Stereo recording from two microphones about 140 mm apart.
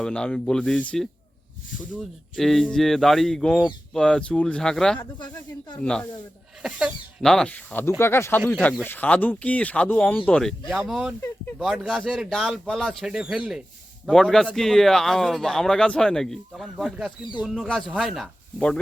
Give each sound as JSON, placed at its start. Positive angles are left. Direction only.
{"t": 0.0, "sound": "speech", "side_deg": 5}
{"t": 2.3, "sound": "speech", "side_deg": 0}
{"t": 4.9, "sound": "speech", "side_deg": 30}
{"t": 5.8, "sound": "speech", "side_deg": 5}
{"t": 6.6, "sound": "speech", "side_deg": -5}